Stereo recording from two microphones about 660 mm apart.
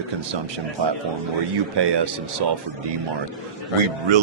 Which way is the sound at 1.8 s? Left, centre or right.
Right.